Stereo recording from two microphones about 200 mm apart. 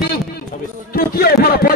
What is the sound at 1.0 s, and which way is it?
Speech, 50° left (ahead or behind).